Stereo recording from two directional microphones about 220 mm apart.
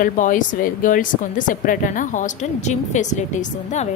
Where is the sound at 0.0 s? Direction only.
35° left (ahead or behind).